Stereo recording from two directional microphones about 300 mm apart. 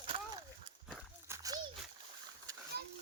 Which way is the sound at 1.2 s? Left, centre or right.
Centre.